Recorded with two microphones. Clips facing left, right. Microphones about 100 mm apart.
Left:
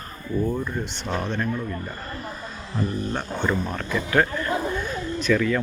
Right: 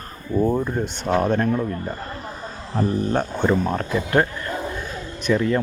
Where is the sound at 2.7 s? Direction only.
45° right (ahead or behind).